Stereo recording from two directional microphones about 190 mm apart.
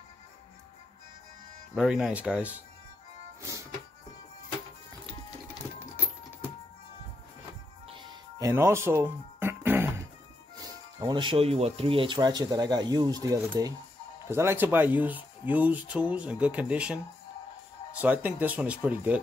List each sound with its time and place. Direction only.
1.8 s speech: 5° right (ahead or behind)
7.9 s music: 25° right (ahead or behind)
10.5 s speech: 20° right (ahead or behind)
18.0 s speech: 10° right (ahead or behind)